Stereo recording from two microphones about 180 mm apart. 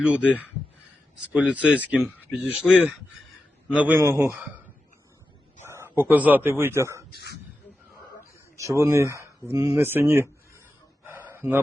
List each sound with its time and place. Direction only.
0.0 s speech: 5° right (ahead or behind)
1.3 s speech: 5° right (ahead or behind)
5.6 s speech: 15° right (ahead or behind)
7.1 s speech: 65° left (ahead or behind)
8.5 s speech: 15° right (ahead or behind)
11.0 s a sound: 10° right (ahead or behind)